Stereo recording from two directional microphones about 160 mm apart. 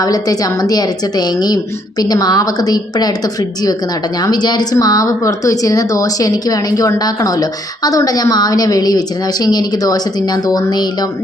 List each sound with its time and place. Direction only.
0.0 s speech: 25° left (ahead or behind)
4.2 s speech: 25° left (ahead or behind)